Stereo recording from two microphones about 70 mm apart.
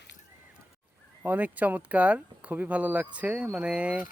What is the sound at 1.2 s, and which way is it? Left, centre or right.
Speech, right.